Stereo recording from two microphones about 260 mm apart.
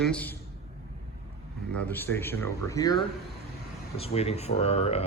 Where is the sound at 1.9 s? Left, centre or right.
Centre; by 5.0 s left.